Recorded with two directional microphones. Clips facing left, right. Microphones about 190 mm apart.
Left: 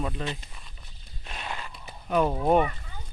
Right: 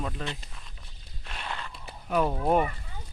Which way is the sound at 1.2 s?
15° left (ahead or behind).